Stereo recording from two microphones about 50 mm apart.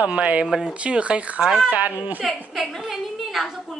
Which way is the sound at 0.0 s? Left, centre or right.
Right.